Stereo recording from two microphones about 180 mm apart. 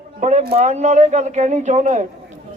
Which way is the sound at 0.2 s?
40° right (ahead or behind).